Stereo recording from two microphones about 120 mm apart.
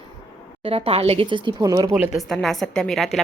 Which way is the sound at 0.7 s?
55° right (ahead or behind).